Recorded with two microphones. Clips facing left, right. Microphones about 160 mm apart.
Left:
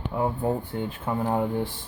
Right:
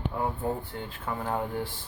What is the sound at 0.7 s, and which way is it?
Speech, 25° left (ahead or behind).